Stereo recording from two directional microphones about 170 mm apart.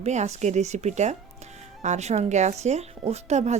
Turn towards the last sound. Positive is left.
turn(degrees=-40)  # may be behind; listen again after turning